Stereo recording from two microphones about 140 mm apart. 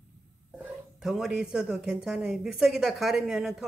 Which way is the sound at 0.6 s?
5° right (ahead or behind).